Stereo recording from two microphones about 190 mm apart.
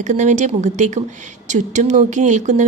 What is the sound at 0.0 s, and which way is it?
Speech, 40° right (ahead or behind).